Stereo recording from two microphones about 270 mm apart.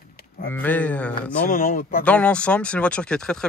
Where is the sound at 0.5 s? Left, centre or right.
Centre.